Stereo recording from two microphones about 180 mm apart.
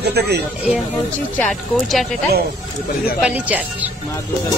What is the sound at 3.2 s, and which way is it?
Speech, 10° right (ahead or behind).